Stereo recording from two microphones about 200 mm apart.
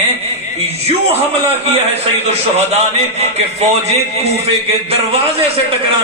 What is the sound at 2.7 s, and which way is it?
A man's voice, 35° right (ahead or behind).